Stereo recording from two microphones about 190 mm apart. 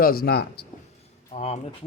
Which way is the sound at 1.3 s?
35° left (ahead or behind).